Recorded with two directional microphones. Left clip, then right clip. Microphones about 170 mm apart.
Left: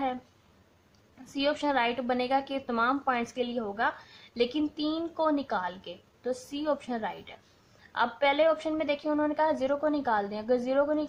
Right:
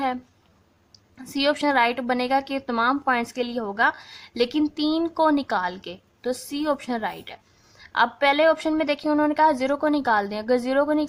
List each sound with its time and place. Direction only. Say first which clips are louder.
1.2 s a woman's voice: right 7 dB; 25° right (ahead or behind)